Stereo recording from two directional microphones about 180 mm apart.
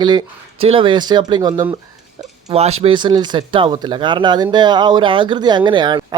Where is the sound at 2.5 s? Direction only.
35° right (ahead or behind).